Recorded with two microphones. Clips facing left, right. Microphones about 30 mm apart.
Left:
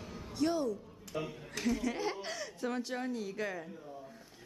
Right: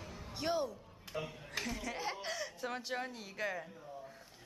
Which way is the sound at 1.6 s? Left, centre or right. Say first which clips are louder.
Left 6 dB; centre.